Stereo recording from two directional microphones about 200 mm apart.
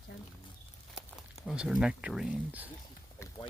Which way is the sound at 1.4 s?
5° right (ahead or behind).